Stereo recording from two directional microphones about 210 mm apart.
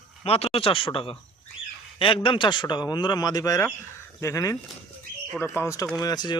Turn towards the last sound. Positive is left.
turn(degrees=20)  # may be behind; listen again after turning